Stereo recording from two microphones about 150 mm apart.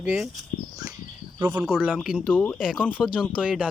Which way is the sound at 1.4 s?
10° right (ahead or behind).